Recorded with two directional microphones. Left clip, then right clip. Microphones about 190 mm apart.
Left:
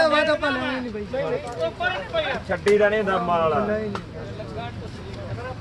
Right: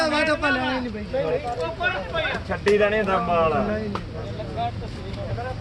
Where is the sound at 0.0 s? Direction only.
15° right (ahead or behind).